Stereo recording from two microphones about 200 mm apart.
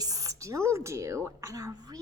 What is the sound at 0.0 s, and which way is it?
Speech, 15° right (ahead or behind).